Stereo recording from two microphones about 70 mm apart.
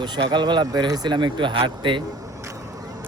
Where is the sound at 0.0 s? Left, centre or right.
Right.